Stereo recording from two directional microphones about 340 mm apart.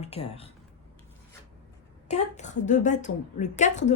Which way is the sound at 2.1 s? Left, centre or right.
Left.